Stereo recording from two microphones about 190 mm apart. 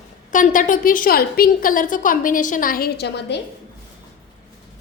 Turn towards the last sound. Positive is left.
turn(degrees=65)  # may be behind; listen again after turning